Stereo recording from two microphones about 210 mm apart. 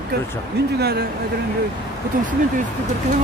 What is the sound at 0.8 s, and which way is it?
Speech, 50° right (ahead or behind).